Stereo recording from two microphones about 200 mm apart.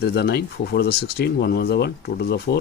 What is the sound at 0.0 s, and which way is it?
Speech, 55° left (ahead or behind).